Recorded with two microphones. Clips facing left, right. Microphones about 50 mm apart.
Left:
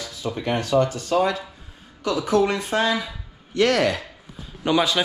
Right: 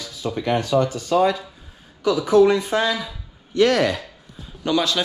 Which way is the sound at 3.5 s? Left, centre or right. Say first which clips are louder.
Right 2 dB; left.